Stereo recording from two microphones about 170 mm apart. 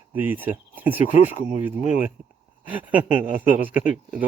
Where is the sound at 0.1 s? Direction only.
10° right (ahead or behind).